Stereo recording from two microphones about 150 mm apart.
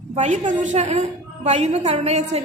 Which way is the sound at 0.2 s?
55° right (ahead or behind).